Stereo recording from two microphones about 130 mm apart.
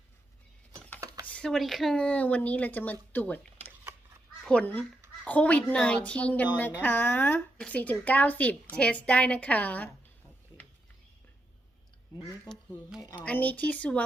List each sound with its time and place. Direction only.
1.2 s speech: 10° left (ahead or behind)
12.5 s speech: 30° left (ahead or behind)
13.2 s speech: 10° left (ahead or behind)